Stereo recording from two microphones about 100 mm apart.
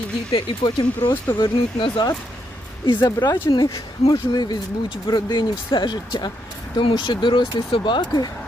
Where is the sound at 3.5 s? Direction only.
50° left (ahead or behind).